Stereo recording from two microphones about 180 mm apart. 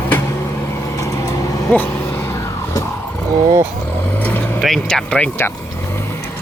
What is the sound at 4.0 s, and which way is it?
Vehicle, 10° left (ahead or behind).